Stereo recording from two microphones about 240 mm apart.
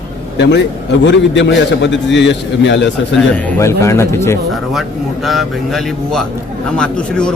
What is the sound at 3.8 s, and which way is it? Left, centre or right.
Speech, centre.